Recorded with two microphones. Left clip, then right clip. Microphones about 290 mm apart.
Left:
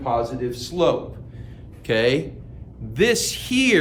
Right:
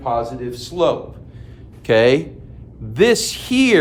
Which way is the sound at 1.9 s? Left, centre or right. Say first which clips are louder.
Right 6 dB; right.